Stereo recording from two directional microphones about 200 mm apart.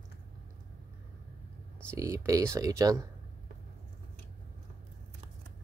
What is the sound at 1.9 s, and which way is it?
Speech, 15° right (ahead or behind).